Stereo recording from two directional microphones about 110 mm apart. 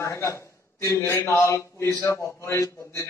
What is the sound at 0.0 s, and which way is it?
Speech, 25° left (ahead or behind).